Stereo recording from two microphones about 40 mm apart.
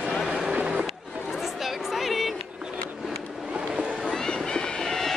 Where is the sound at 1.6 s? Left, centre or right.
Centre.